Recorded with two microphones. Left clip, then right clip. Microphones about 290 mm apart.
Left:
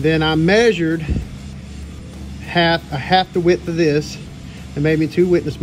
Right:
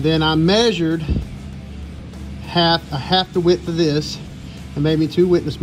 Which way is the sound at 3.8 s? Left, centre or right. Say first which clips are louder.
Left 3 dB; centre.